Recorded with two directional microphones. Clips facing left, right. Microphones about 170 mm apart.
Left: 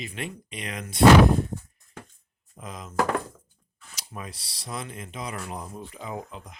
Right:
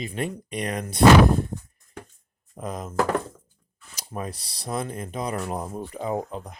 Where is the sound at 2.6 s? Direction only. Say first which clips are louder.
Right 7 dB; 40° right (ahead or behind).